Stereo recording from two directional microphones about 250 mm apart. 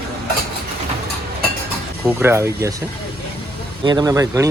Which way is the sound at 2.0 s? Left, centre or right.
Centre.